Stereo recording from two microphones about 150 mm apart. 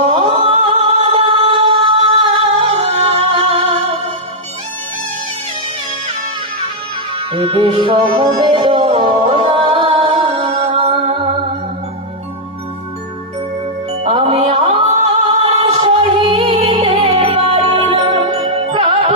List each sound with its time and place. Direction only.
0.0 s music: 40° right (ahead or behind)
7.2 s music: 40° right (ahead or behind)
14.0 s music: 40° right (ahead or behind)